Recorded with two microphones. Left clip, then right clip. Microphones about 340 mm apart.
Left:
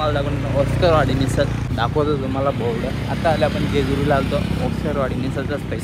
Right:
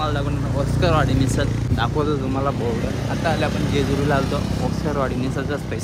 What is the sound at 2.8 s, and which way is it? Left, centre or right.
Speech, right.